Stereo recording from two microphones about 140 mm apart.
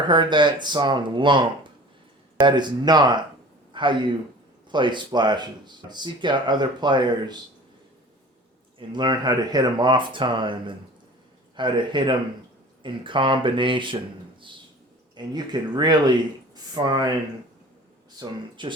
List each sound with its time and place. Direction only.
0.0 s a man's voice: 35° right (ahead or behind)
8.9 s speech: 30° right (ahead or behind)
15.1 s speech: 30° right (ahead or behind)
18.2 s speech: 35° right (ahead or behind)